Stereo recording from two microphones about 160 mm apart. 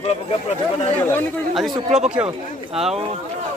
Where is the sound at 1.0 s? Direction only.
15° left (ahead or behind).